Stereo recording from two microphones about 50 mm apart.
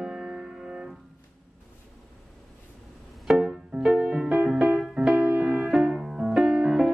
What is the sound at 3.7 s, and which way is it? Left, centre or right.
Music, centre.